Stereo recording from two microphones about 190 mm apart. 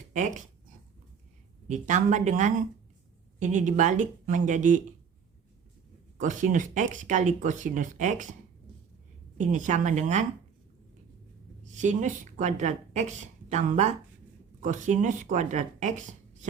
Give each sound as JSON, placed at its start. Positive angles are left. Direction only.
{"t": 0.1, "sound": "speech", "side_deg": -40}
{"t": 1.6, "sound": "speech", "side_deg": -40}
{"t": 6.1, "sound": "speech", "side_deg": -45}
{"t": 9.4, "sound": "speech", "side_deg": -40}
{"t": 11.6, "sound": "a woman's voice", "side_deg": -40}